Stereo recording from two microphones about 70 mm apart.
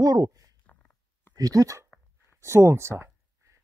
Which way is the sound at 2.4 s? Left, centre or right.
Right.